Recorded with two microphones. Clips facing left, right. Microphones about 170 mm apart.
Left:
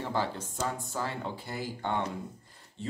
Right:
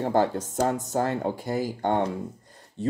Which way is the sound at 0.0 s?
50° right (ahead or behind).